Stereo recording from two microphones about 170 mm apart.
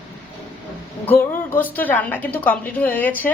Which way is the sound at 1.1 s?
10° left (ahead or behind).